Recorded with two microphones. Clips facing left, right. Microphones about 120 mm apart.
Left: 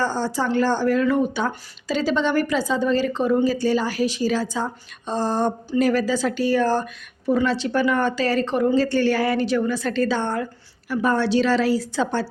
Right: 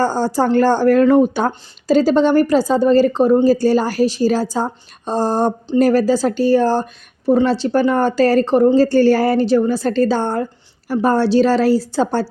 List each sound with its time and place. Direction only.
0.0 s speech: 40° right (ahead or behind)